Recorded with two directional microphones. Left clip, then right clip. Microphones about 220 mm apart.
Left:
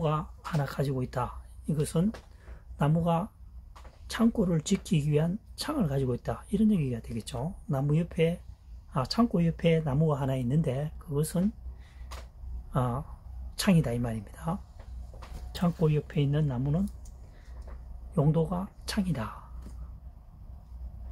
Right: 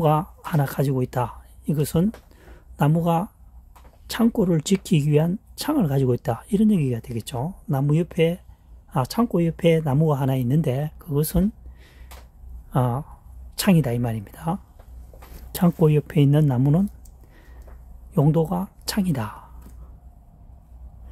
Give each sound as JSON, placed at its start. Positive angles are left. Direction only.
{"t": 0.0, "sound": "speech", "side_deg": -55}
{"t": 12.7, "sound": "speech", "side_deg": -50}
{"t": 18.1, "sound": "speech", "side_deg": -55}